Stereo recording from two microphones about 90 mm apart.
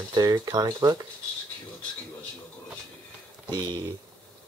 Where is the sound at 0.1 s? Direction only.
50° right (ahead or behind).